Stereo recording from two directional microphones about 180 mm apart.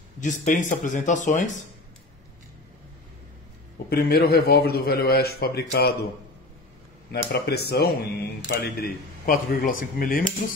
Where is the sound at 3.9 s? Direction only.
60° left (ahead or behind).